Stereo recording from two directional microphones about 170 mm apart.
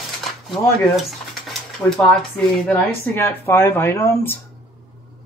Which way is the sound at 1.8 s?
15° left (ahead or behind).